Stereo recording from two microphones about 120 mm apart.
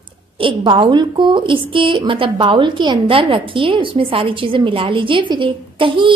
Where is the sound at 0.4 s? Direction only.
45° right (ahead or behind).